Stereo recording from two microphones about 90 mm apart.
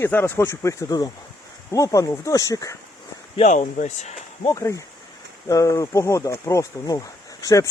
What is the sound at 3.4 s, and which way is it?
Speech, 90° left.